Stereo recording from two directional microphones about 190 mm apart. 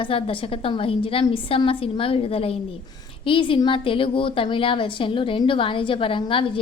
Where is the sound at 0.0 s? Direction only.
30° left (ahead or behind).